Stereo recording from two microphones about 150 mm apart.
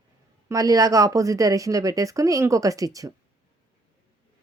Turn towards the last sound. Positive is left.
turn(degrees=-20)  # may be behind; listen again after turning